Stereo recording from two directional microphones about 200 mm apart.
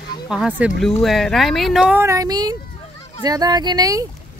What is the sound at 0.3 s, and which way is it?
Speech, 5° right (ahead or behind).